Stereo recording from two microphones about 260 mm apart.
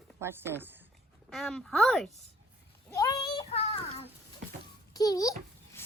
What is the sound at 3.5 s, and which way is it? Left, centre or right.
Child singing, left.